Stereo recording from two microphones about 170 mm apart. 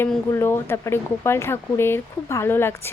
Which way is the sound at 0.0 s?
15° left (ahead or behind).